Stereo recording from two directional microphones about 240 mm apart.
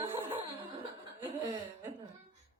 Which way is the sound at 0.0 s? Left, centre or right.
Centre.